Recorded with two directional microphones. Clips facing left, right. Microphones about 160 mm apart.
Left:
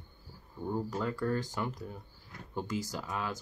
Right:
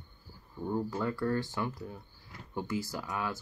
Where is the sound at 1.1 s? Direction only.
15° left (ahead or behind).